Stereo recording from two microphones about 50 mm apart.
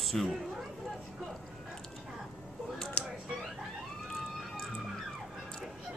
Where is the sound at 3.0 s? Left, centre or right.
Left.